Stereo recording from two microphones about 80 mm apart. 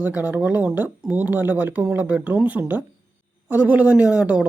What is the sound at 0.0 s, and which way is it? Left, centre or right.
Speech, centre.